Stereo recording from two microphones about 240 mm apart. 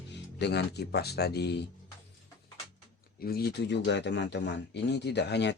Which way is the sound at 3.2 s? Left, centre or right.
Left.